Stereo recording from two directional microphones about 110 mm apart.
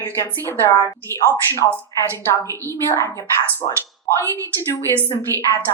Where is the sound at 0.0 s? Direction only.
20° left (ahead or behind).